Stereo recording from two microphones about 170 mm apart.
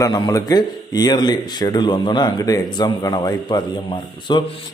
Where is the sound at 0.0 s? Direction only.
20° left (ahead or behind).